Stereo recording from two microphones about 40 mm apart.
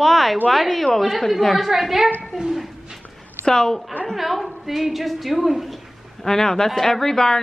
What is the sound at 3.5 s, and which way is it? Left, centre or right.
Speech, centre.